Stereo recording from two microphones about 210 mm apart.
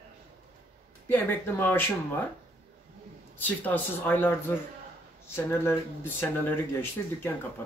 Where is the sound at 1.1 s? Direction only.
10° left (ahead or behind).